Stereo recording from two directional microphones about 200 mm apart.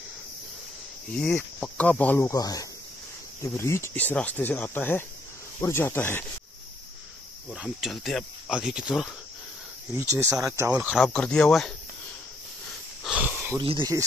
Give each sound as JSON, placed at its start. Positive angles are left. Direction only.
{"t": 1.1, "sound": "speech", "side_deg": 5}
{"t": 7.5, "sound": "speech", "side_deg": -5}
{"t": 11.0, "sound": "speech", "side_deg": 5}
{"t": 13.0, "sound": "a sound", "side_deg": -5}
{"t": 13.6, "sound": "speech", "side_deg": -25}